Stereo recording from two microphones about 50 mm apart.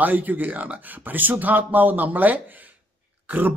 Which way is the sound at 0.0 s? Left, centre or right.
Right.